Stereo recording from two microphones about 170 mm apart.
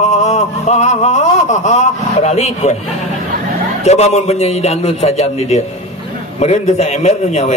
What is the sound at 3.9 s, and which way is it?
Speech, 40° left (ahead or behind).